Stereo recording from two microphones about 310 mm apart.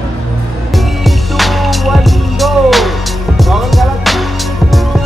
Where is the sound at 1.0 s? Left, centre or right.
Centre.